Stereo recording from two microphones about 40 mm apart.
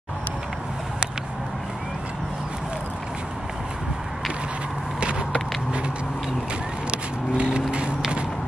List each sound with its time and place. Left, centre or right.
5.0 s vehicle: right
6.9 s vehicle: right